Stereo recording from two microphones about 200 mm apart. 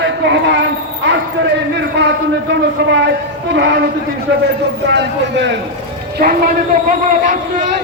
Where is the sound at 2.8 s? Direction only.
60° right (ahead or behind).